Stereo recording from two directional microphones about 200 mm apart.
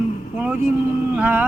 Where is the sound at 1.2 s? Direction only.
10° right (ahead or behind).